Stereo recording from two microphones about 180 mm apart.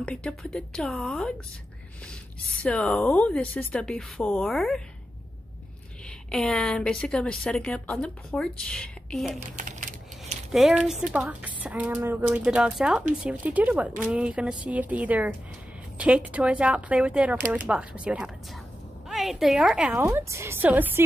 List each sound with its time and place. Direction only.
0.0 s a woman's voice: 5° left (ahead or behind)
2.6 s a woman's voice: 5° left (ahead or behind)
6.3 s a woman's voice: centre (ahead or behind)
9.6 s typing: 45° right (ahead or behind)
10.5 s a woman's voice: 5° right (ahead or behind)
20.0 s speech: 15° right (ahead or behind)